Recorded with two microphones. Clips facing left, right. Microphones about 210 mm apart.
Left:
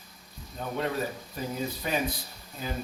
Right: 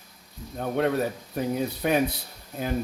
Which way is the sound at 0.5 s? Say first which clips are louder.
Right 6 dB; 60° right (ahead or behind).